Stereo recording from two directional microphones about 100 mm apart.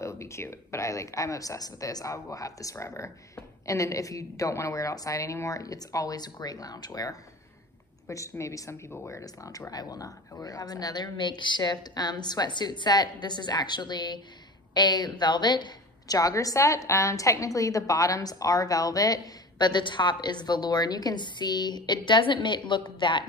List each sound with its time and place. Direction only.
0.0 s a woman's voice: 30° left (ahead or behind); by 23.2 s 50° left (ahead or behind)